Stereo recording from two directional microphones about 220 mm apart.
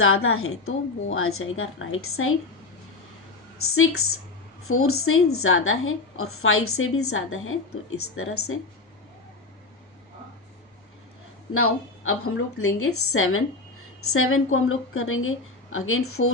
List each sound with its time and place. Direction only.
0.0 s a woman's voice: 70° left (ahead or behind)
4.7 s a woman's voice: 75° left (ahead or behind)
11.5 s a woman's voice: 75° left (ahead or behind)